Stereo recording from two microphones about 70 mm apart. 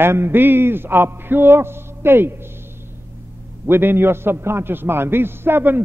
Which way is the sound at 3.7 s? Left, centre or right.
Right.